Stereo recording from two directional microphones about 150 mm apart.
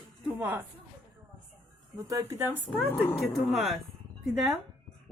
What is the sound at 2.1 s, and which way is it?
Speech, 20° right (ahead or behind).